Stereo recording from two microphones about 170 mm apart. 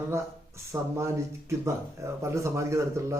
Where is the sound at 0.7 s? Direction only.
10° right (ahead or behind).